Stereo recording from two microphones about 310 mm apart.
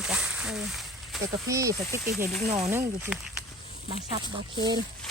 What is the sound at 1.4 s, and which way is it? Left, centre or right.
Speech, centre.